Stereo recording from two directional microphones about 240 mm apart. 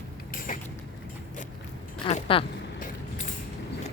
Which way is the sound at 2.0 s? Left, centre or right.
Left.